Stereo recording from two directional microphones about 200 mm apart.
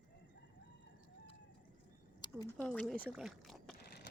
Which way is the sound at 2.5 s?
5° left (ahead or behind).